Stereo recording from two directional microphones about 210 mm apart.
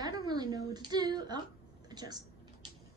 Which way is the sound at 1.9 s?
20° right (ahead or behind).